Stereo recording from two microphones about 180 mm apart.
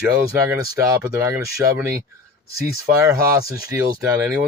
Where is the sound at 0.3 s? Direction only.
20° right (ahead or behind).